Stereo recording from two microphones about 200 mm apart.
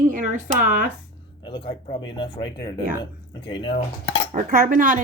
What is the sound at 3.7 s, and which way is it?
Cutlery, 75° left (ahead or behind).